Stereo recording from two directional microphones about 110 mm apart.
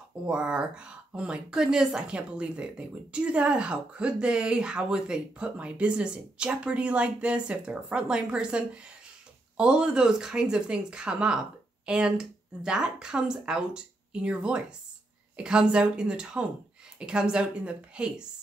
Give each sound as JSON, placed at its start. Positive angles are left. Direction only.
{"t": 0.3, "sound": "speech", "side_deg": -10}